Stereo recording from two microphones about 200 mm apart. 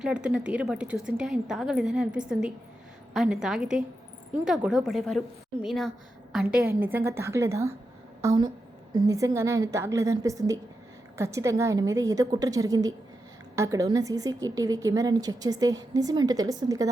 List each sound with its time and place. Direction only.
0.0 s a woman's voice: 5° right (ahead or behind)